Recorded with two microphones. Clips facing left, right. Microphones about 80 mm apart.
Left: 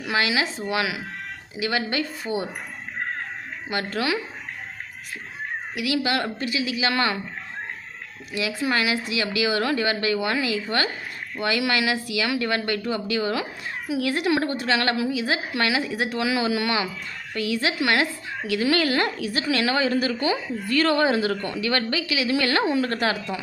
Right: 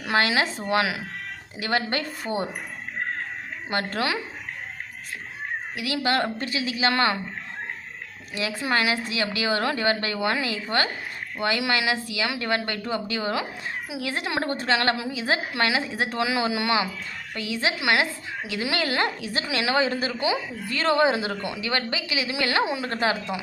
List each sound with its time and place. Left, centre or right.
0.0 s a woman's voice: right
3.7 s a woman's voice: right
5.7 s a woman's voice: right
8.3 s a woman's voice: right